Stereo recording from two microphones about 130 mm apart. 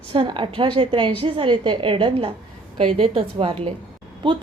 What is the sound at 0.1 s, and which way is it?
A woman's voice, 40° right (ahead or behind).